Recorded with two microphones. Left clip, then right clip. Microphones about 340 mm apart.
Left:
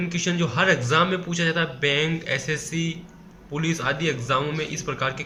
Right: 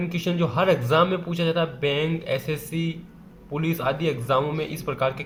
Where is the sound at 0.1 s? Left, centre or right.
Centre.